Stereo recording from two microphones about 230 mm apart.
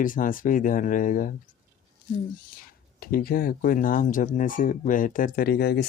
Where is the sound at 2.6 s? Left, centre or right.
Left.